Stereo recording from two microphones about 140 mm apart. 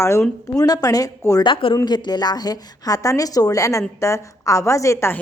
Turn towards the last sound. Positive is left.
turn(degrees=20)  # may be behind; listen again after turning